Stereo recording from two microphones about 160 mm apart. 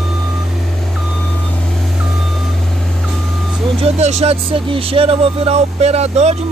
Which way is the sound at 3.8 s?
45° right (ahead or behind).